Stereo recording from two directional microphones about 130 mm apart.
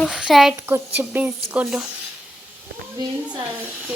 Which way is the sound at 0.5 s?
15° right (ahead or behind).